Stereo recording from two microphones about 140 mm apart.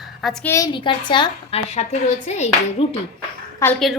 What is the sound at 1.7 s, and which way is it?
Speech, 50° left (ahead or behind).